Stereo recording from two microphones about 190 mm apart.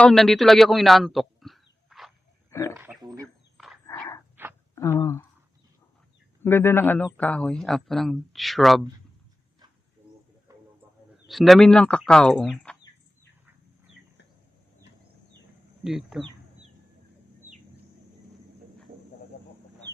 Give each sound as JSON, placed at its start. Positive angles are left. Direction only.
{"t": 0.0, "sound": "speech", "side_deg": 0}
{"t": 2.5, "sound": "speech", "side_deg": 15}
{"t": 2.7, "sound": "speech", "side_deg": -10}
{"t": 3.8, "sound": "dog", "side_deg": 15}
{"t": 4.4, "sound": "a sound", "side_deg": -10}
{"t": 4.7, "sound": "speech", "side_deg": 15}
{"t": 6.4, "sound": "a man's voice", "side_deg": 10}
{"t": 10.5, "sound": "a sound", "side_deg": -15}
{"t": 11.3, "sound": "a man's voice", "side_deg": 0}
{"t": 15.8, "sound": "a man's voice", "side_deg": 0}